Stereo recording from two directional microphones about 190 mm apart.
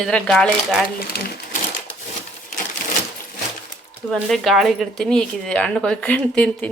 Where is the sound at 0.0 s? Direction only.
Centre (ahead or behind).